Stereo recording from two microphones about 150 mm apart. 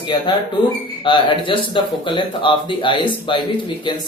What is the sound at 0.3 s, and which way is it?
Speech, 30° left (ahead or behind).